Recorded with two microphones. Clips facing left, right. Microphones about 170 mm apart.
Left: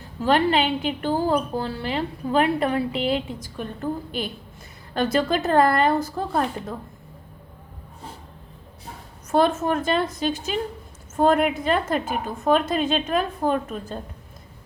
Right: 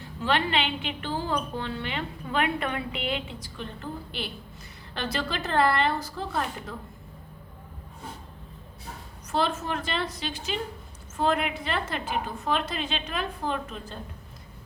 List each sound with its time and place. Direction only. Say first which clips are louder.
0.2 s a woman's voice: left 7 dB; 40° left (ahead or behind)
9.3 s a woman's voice: left 8 dB; 50° left (ahead or behind)